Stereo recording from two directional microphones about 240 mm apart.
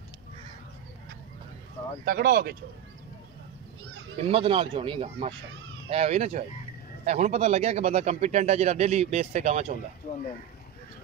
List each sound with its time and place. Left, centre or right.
2.0 s speech: right
4.2 s speech: right